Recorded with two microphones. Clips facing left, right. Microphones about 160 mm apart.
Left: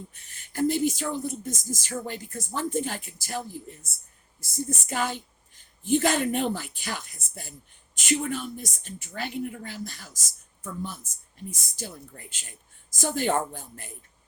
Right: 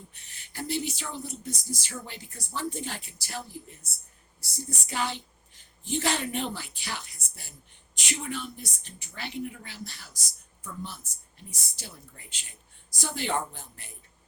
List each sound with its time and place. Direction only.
0.1 s speech: 45° left (ahead or behind)